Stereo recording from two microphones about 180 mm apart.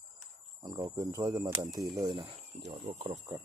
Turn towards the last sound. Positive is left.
turn(degrees=-35)  # may be behind; listen again after turning